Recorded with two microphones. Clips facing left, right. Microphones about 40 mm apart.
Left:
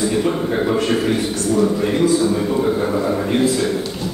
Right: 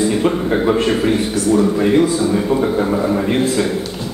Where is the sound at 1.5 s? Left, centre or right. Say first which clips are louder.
Right 4 dB; right.